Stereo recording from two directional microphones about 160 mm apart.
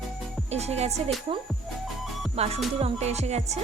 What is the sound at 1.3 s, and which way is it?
Music, 30° right (ahead or behind).